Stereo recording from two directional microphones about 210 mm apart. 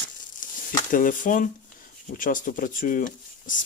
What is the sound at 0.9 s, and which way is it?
Speech, 40° left (ahead or behind).